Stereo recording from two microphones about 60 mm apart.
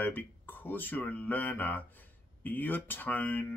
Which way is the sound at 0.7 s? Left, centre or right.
Left.